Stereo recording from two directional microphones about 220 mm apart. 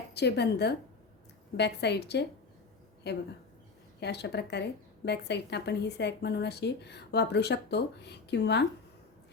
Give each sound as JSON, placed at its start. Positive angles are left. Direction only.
{"t": 0.1, "sound": "speech", "side_deg": 50}